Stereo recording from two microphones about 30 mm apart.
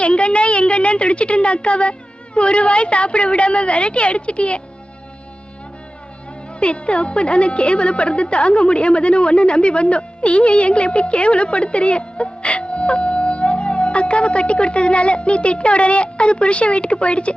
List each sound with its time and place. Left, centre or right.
0.0 s a woman's voice: left
6.6 s speech: left